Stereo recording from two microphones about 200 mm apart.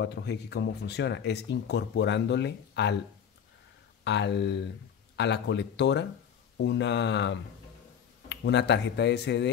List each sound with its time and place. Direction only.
0.0 s speech: 60° left (ahead or behind)
4.0 s speech: 60° left (ahead or behind)